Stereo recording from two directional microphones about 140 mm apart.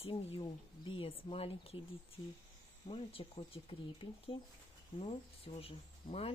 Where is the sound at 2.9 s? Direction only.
40° left (ahead or behind).